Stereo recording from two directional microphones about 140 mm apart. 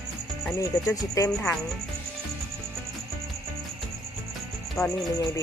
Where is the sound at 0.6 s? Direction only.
25° left (ahead or behind).